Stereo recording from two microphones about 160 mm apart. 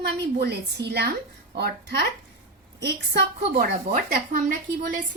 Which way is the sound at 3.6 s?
65° right (ahead or behind).